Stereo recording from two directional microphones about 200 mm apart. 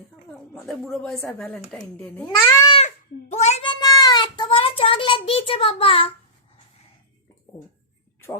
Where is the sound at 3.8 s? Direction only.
20° left (ahead or behind).